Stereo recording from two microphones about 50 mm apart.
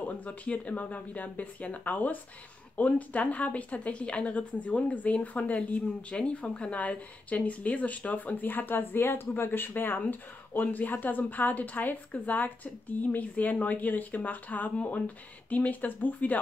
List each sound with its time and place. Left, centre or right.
0.0 s a woman's voice: left